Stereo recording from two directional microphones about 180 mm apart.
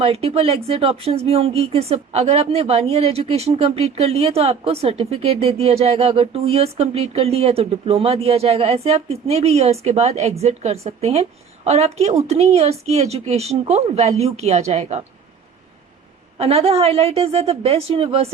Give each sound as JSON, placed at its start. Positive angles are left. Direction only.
{"t": 0.0, "sound": "speech", "side_deg": -30}
{"t": 16.4, "sound": "speech", "side_deg": -35}